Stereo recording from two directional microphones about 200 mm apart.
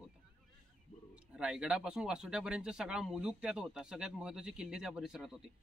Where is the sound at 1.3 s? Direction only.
5° right (ahead or behind).